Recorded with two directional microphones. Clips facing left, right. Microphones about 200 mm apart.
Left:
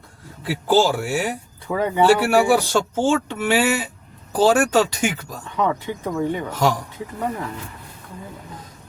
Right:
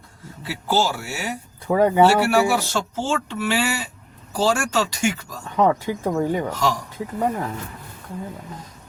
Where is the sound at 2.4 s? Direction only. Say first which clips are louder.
Left 4 dB; 50° left (ahead or behind).